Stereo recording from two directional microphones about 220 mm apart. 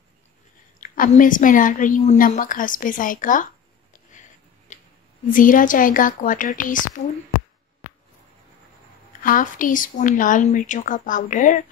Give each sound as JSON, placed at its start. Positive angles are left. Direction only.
{"t": 0.7, "sound": "a woman's voice", "side_deg": 35}
{"t": 4.7, "sound": "a sound", "side_deg": 35}
{"t": 5.3, "sound": "a woman's voice", "side_deg": 40}
{"t": 9.2, "sound": "a woman's voice", "side_deg": 40}